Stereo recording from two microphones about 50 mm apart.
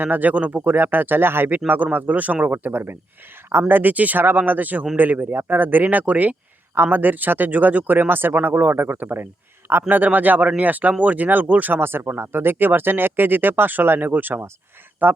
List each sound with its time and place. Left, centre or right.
0.0 s speech: right
0.8 s speech: right
1.5 s speech: right
8.7 s speech: right
11.8 s speech: right